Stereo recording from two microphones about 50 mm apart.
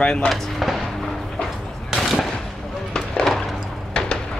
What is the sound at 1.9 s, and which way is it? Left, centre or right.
Gunshot, centre.